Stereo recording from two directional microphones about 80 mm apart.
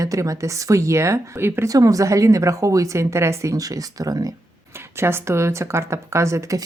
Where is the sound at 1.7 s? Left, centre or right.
Right.